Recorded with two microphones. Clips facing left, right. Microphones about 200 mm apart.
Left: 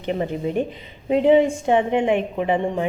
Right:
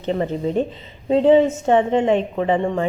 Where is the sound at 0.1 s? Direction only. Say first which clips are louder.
Right 2 dB; 10° left (ahead or behind).